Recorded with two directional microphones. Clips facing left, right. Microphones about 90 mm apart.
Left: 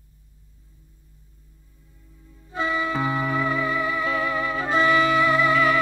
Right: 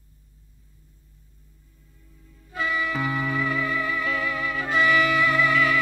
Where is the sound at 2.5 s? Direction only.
25° left (ahead or behind).